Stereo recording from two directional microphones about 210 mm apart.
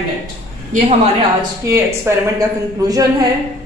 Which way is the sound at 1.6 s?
15° right (ahead or behind).